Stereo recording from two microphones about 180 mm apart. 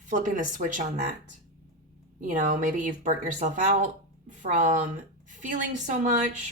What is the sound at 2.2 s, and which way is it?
A woman's voice, 45° right (ahead or behind).